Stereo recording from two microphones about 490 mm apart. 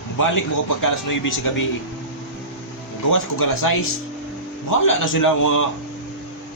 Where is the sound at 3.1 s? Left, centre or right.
Left.